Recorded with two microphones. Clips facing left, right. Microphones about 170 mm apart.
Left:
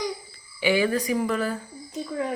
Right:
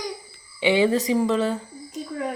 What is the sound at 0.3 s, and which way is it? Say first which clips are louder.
Speech: right 4 dB; 25° right (ahead or behind).